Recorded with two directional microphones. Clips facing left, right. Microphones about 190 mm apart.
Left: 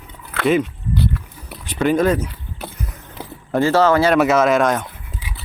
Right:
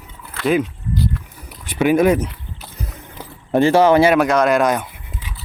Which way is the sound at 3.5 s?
15° right (ahead or behind).